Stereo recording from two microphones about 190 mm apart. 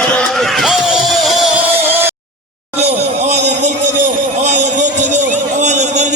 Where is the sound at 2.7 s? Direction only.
35° right (ahead or behind).